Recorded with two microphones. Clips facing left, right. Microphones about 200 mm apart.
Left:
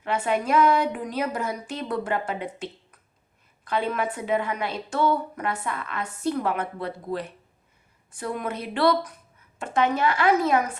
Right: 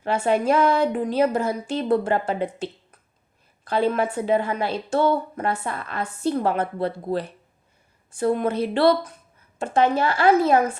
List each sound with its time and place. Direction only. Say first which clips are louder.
0.0 s a woman's voice: right 4 dB; 30° right (ahead or behind)